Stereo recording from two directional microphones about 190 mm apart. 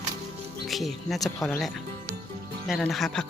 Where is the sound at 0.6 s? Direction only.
Centre (ahead or behind).